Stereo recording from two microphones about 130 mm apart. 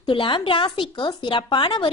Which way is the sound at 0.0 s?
40° left (ahead or behind).